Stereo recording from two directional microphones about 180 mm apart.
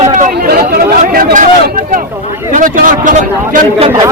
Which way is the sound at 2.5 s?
50° right (ahead or behind).